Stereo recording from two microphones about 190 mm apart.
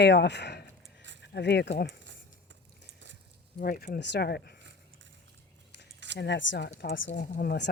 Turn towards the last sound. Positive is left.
turn(degrees=60)  # may be behind; listen again after turning